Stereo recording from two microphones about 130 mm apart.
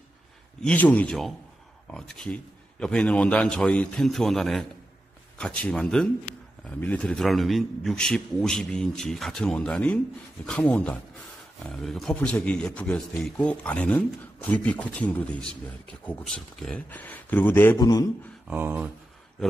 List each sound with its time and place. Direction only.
0.6 s a man's voice: 10° left (ahead or behind)
17.7 s a man's voice: 30° left (ahead or behind)
18.5 s a sound: 15° right (ahead or behind)